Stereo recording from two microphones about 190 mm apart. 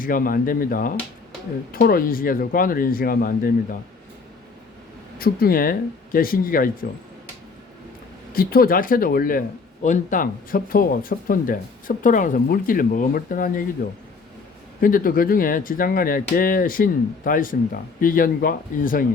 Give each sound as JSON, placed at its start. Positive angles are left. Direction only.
{"t": 0.0, "sound": "speech", "side_deg": 50}
{"t": 5.1, "sound": "speech", "side_deg": 50}
{"t": 8.3, "sound": "speech", "side_deg": 50}
{"t": 14.8, "sound": "speech", "side_deg": 45}